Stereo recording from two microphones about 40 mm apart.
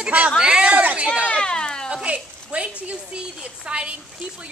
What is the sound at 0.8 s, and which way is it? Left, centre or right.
Speech, right.